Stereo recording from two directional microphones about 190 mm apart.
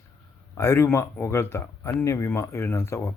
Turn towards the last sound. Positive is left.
turn(degrees=15)  # may be behind; listen again after turning